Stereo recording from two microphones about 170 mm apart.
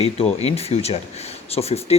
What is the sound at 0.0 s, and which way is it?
Speech, 35° left (ahead or behind).